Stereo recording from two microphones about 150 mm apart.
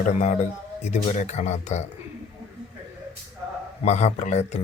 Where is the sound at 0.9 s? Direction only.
50° left (ahead or behind).